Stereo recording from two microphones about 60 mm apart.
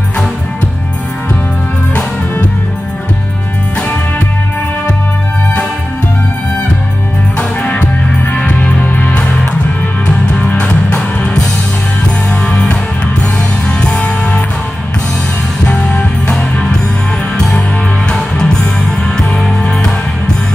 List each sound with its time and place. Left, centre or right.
7.3 s music: centre
10.5 s music: centre
12.4 s music: centre
13.7 s music: centre
15.7 s music: centre
18.1 s music: centre